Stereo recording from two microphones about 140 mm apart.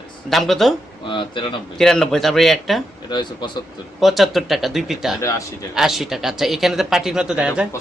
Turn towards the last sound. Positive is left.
turn(degrees=-5)  # may be behind; listen again after turning